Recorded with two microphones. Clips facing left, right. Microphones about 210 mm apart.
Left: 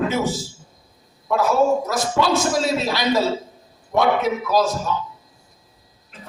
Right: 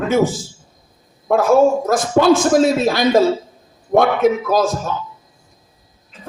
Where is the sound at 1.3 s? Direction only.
50° right (ahead or behind).